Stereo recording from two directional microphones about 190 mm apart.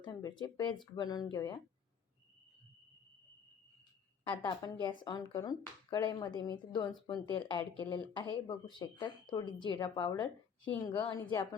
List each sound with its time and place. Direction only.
0.0 s speech: 20° left (ahead or behind)
4.2 s speech: 25° left (ahead or behind)